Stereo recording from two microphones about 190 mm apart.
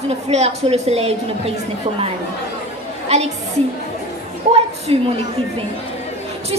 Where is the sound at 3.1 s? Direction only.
35° right (ahead or behind).